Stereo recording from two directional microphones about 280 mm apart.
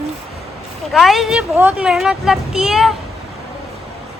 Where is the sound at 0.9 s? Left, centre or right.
Centre.